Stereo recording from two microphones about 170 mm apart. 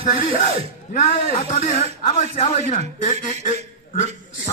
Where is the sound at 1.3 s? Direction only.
40° left (ahead or behind).